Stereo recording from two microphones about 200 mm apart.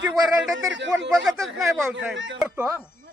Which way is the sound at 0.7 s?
65° right (ahead or behind).